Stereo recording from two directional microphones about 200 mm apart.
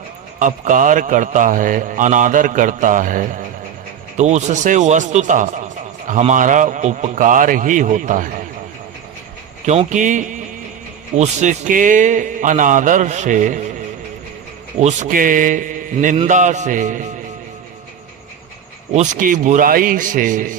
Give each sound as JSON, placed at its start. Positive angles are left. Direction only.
{"t": 0.3, "sound": "a man's voice", "side_deg": -40}
{"t": 9.6, "sound": "a man's voice", "side_deg": -35}
{"t": 14.8, "sound": "a man's voice", "side_deg": -35}
{"t": 18.9, "sound": "a man's voice", "side_deg": -40}